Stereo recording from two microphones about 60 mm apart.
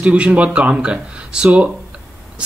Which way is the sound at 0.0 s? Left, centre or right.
Right.